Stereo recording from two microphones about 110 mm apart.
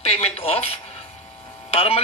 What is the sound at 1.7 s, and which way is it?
Speech, 60° left (ahead or behind).